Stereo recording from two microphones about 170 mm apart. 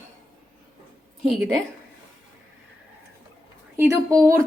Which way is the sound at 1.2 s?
Centre (ahead or behind).